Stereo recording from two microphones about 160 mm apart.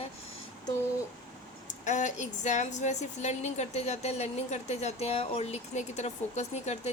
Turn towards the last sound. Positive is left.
turn(degrees=45)  # may be behind; listen again after turning